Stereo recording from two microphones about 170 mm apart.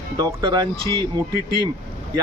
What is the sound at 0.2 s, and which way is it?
Speech, 20° right (ahead or behind).